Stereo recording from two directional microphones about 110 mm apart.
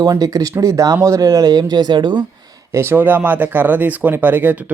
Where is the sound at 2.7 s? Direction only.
20° right (ahead or behind).